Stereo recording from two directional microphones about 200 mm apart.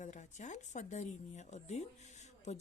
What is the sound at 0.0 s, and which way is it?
Speech, 35° left (ahead or behind).